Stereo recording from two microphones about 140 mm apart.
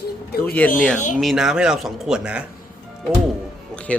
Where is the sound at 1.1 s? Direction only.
5° right (ahead or behind).